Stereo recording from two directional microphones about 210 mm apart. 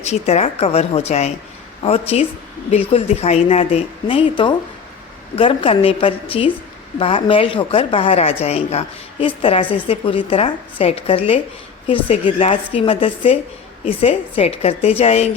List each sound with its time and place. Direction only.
0.0 s a woman's voice: 30° left (ahead or behind)